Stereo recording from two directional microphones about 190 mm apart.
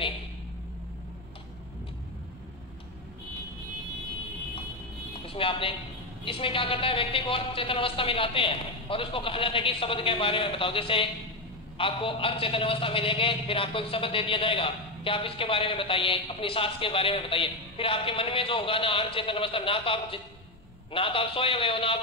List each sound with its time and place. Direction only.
5.2 s a man's voice: 30° left (ahead or behind)